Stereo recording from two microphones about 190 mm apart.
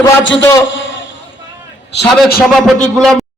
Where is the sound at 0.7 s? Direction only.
80° left.